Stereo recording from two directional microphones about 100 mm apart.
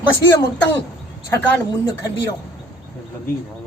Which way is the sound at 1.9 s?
45° left (ahead or behind).